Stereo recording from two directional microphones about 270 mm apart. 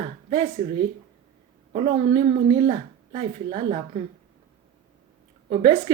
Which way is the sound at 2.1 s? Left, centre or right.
Centre.